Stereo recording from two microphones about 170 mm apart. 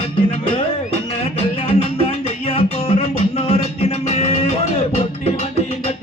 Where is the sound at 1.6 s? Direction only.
35° left (ahead or behind).